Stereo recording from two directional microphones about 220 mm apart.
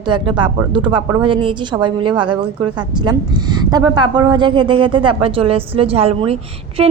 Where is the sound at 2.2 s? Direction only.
90° right.